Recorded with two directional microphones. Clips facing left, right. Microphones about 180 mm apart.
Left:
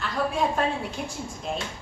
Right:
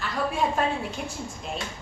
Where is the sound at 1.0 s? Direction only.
Centre (ahead or behind).